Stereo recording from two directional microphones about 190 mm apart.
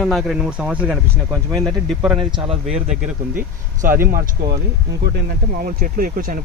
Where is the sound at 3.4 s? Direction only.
45° right (ahead or behind).